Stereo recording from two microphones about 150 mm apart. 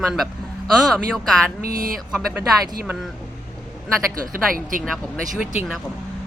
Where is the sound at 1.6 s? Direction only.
75° right (ahead or behind).